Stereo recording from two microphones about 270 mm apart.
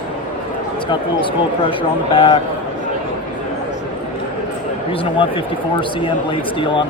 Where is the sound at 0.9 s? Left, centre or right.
Centre.